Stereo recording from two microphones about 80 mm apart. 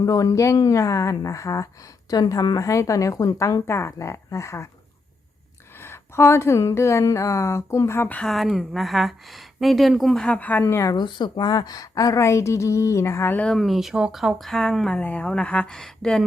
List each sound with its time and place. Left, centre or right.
0.0 s a woman's voice: left
2.0 s speech: left
5.8 s speech: left
8.0 s speech: centre
8.3 s speech: centre
10.2 s speech: centre; by 10.9 s left
10.9 s speech: left
13.5 s speech: centre
14.9 s speech: centre